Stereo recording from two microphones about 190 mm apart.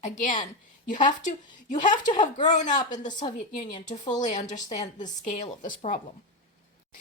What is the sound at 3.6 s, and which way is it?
A woman's voice, 40° left (ahead or behind).